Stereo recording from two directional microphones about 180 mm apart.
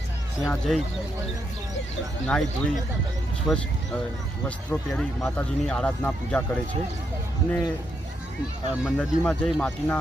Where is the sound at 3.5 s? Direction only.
Centre (ahead or behind).